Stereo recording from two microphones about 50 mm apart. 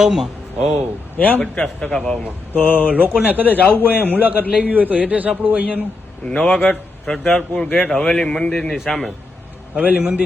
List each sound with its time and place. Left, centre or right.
0.0 s speech: centre
1.2 s a man's voice: left
1.5 s a man's voice: centre
2.5 s a man's voice: left
2.8 s a man's voice: right
3.5 s a man's voice: left
4.0 s a man's voice: right
6.2 s a man's voice: centre
6.7 s a man's voice: centre
8.7 s a man's voice: centre
9.7 s a man's voice: right